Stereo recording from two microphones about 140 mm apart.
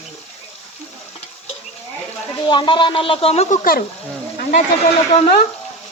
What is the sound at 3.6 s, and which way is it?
Speech, 90° left.